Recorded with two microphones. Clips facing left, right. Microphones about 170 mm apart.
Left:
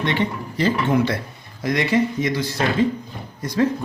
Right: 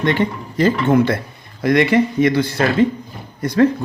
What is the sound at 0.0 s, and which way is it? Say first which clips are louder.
Speech: right 4 dB; 45° right (ahead or behind).